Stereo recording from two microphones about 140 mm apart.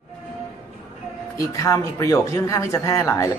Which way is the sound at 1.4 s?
20° left (ahead or behind).